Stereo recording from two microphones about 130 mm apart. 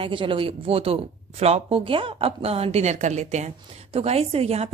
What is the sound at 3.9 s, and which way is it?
Speech, 50° right (ahead or behind).